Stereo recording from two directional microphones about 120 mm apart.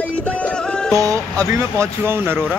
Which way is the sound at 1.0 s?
25° right (ahead or behind).